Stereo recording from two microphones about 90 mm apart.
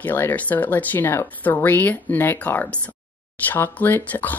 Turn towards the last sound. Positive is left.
turn(degrees=20)  # may be behind; listen again after turning